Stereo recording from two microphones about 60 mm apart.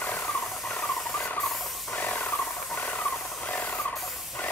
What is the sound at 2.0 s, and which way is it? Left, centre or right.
Wild animals, left.